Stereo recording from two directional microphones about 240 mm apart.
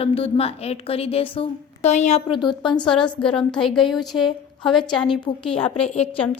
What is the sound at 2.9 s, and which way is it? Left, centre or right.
A woman's voice, centre.